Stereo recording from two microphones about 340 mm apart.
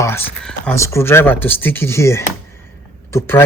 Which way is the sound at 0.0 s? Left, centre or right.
Centre.